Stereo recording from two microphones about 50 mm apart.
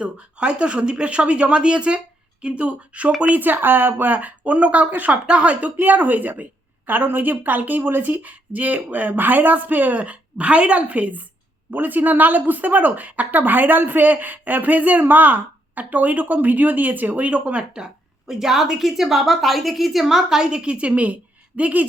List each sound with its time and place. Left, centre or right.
0.0 s speech: right
5.2 s speech: right
5.8 s speech: right
18.3 s a woman's voice: centre; by 21.8 s right